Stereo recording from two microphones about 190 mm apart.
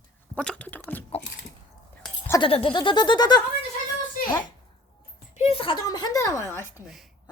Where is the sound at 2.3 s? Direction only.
25° left (ahead or behind).